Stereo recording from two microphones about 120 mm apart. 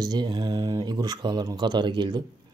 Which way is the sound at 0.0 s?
35° right (ahead or behind).